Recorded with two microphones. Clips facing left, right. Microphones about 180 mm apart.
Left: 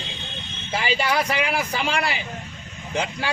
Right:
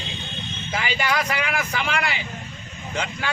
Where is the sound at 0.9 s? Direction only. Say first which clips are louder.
Left 1 dB; 30° left (ahead or behind).